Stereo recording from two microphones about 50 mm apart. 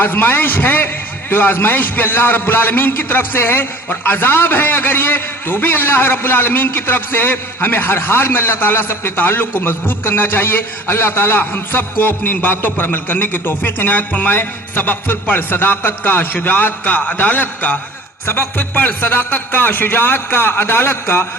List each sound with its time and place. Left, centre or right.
0.0 s a man's voice: left